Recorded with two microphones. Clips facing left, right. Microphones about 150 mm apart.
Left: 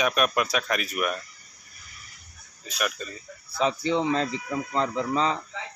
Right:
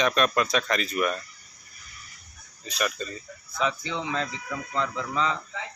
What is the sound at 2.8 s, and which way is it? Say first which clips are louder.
Speech: right 1 dB; 5° left (ahead or behind).